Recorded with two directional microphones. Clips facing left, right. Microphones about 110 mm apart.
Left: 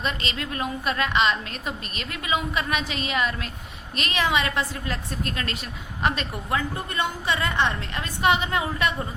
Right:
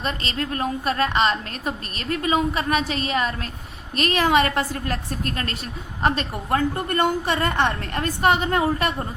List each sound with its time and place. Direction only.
0.0 s a woman's voice: 40° right (ahead or behind)